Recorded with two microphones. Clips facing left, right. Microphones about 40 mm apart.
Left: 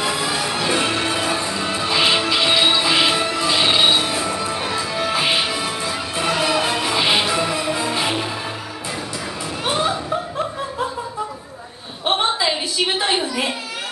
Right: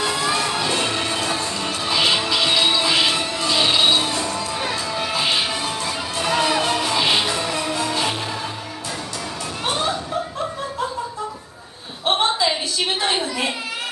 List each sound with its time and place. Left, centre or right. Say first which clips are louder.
0.0 s music: even; centre
6.2 s music: even; centre